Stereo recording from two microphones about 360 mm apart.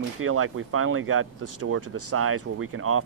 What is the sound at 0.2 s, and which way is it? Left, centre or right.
Speech, right.